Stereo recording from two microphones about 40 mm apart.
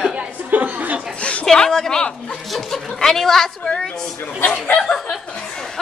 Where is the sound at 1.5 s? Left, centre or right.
Centre.